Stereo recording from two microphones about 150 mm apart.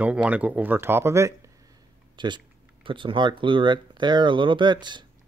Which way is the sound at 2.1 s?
30° right (ahead or behind).